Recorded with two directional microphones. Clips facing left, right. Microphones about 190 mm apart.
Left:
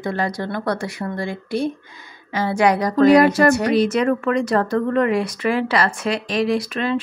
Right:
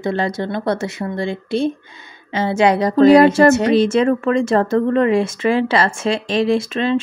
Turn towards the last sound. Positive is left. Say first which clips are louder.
# right 4 dB
turn(degrees=-25)  # may be behind; listen again after turning